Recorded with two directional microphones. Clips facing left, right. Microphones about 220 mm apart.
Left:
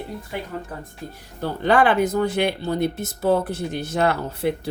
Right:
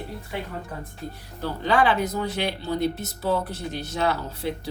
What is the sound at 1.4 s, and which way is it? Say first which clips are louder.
A woman's voice: left 4 dB; 55° left (ahead or behind).